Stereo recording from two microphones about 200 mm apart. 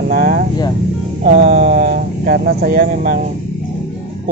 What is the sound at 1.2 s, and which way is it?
Speech, 35° right (ahead or behind).